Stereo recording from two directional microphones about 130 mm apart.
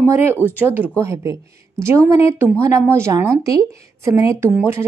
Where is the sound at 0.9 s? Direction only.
20° right (ahead or behind).